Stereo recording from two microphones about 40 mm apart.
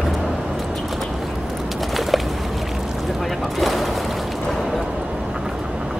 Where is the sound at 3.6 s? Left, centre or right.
Centre.